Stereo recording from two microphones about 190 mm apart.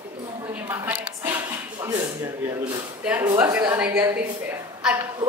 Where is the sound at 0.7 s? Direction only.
10° right (ahead or behind).